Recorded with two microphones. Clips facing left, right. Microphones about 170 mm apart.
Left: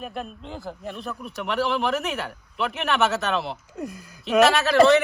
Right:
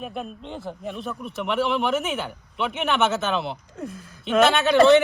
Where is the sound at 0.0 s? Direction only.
Centre (ahead or behind).